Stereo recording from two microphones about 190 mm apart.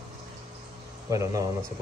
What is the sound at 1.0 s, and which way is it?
Speech, 15° right (ahead or behind).